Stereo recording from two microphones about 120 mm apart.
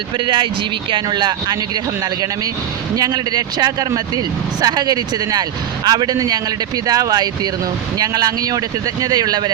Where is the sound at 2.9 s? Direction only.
35° right (ahead or behind).